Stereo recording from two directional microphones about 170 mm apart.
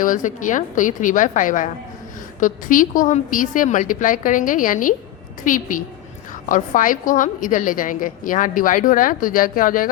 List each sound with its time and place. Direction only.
0.0 s a woman's voice: 50° left (ahead or behind)